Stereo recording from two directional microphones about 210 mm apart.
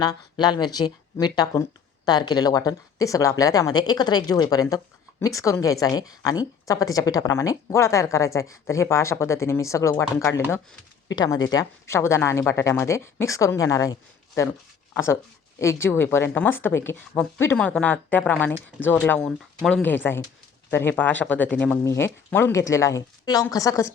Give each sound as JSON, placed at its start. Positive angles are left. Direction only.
{"t": 0.0, "sound": "a woman's voice", "side_deg": 20}